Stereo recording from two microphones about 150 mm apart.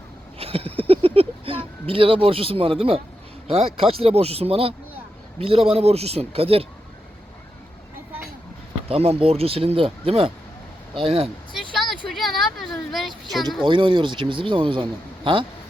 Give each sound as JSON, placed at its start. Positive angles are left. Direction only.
{"t": 0.3, "sound": "speech", "side_deg": -40}
{"t": 8.9, "sound": "speech", "side_deg": -40}
{"t": 11.5, "sound": "vehicle", "side_deg": 0}
{"t": 12.0, "sound": "speech", "side_deg": 0}
{"t": 13.7, "sound": "speech", "side_deg": -35}